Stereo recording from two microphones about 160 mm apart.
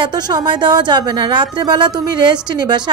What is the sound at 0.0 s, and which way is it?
A woman's voice, 30° right (ahead or behind).